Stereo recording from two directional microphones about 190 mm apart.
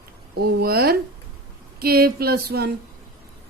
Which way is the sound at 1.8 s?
55° right (ahead or behind).